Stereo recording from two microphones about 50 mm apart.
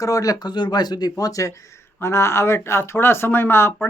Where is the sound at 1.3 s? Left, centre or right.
Left.